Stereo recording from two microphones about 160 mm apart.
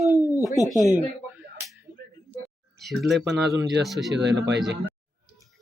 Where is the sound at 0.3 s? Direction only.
20° left (ahead or behind).